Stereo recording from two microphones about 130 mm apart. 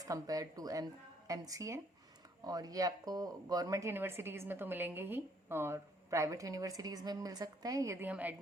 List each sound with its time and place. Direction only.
0.0 s speech: 25° right (ahead or behind)